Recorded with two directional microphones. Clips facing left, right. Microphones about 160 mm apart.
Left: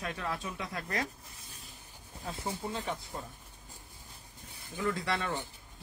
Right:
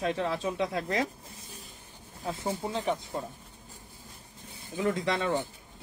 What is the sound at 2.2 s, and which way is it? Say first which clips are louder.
Speech: right 5 dB; 25° right (ahead or behind).